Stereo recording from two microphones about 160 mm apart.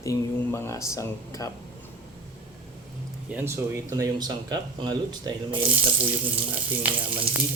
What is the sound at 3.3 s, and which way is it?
Speech, 15° right (ahead or behind).